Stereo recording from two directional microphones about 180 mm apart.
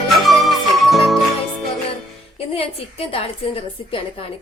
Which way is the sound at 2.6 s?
35° left (ahead or behind).